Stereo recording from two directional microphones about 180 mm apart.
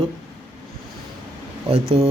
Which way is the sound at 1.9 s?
30° right (ahead or behind).